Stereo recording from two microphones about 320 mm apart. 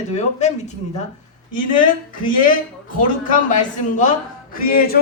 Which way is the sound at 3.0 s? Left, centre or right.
Left.